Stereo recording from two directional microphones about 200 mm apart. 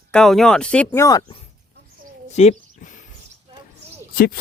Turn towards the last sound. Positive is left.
turn(degrees=50)  # may be behind; listen again after turning